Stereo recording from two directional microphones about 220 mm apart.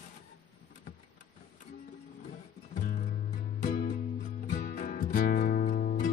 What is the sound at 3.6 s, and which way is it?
Music, 40° left (ahead or behind).